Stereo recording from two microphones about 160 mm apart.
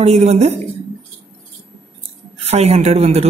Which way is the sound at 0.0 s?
45° right (ahead or behind).